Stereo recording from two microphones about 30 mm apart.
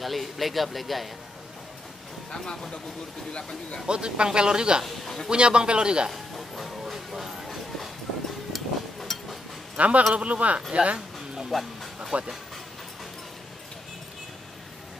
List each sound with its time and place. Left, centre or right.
0.0 s speech: centre
2.3 s a man's voice: centre
3.8 s speech: right
4.8 s a man's voice: centre
5.3 s speech: right
6.1 s music: centre
6.8 s a sound: centre
8.5 s a sound: centre
9.8 s speech: right
11.5 s a man's voice: centre
12.1 s speech: right